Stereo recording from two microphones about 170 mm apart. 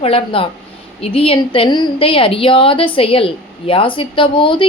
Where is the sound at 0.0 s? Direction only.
35° left (ahead or behind).